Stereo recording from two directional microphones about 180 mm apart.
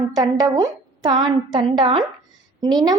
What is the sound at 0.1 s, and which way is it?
A woman's voice, 20° right (ahead or behind).